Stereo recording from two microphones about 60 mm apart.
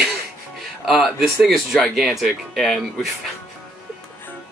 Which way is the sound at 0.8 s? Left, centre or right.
Centre.